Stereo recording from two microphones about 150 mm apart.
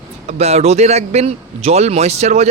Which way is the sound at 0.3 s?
45° right (ahead or behind).